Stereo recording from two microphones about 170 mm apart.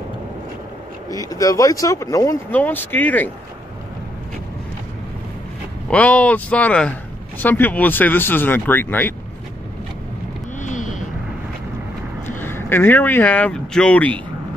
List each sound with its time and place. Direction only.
1.1 s speech: 20° left (ahead or behind)
5.9 s speech: 5° left (ahead or behind)
10.6 s vehicle: 45° left (ahead or behind)
12.4 s speech: 15° left (ahead or behind)